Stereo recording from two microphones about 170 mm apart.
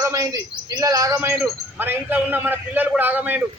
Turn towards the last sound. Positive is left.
turn(degrees=-10)  # may be behind; listen again after turning